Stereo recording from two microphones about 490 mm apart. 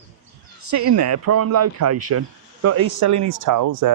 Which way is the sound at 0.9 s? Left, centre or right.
Right.